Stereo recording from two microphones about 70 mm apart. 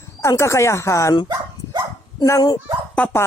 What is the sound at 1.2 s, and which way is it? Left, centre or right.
Dog, right.